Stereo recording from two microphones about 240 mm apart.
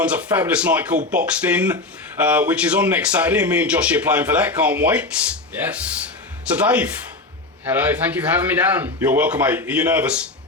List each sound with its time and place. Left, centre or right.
0.0 s a man's voice: centre